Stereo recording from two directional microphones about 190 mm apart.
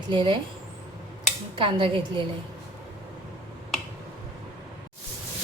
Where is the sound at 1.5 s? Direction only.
25° right (ahead or behind).